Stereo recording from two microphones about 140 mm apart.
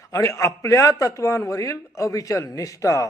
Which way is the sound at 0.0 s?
20° left (ahead or behind).